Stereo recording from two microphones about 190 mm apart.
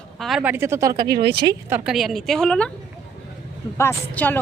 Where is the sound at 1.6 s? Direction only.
10° right (ahead or behind).